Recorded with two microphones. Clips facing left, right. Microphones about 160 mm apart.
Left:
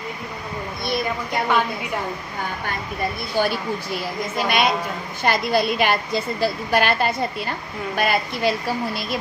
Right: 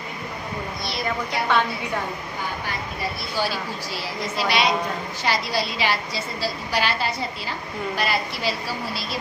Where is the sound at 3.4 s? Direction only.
55° left (ahead or behind).